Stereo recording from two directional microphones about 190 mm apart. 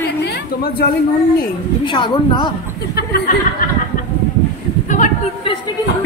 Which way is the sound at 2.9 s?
55° left (ahead or behind).